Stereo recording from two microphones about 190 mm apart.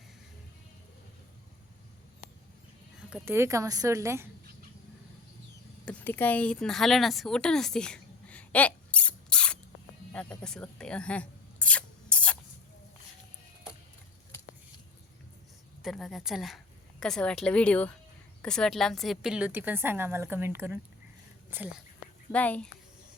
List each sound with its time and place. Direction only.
3.1 s a woman's voice: 15° right (ahead or behind)
5.8 s a sound: 10° left (ahead or behind)
15.8 s a woman's voice: centre (ahead or behind)
22.3 s speech: 5° left (ahead or behind)